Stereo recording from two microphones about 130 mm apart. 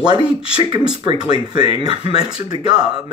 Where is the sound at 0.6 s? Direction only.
35° right (ahead or behind).